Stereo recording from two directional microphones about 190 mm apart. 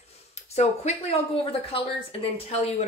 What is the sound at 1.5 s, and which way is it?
Speech, 30° left (ahead or behind).